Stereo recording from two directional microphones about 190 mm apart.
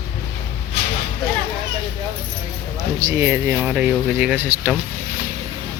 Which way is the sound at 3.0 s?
15° right (ahead or behind).